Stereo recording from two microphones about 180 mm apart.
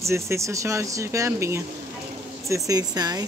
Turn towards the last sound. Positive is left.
turn(degrees=-20)  # may be behind; listen again after turning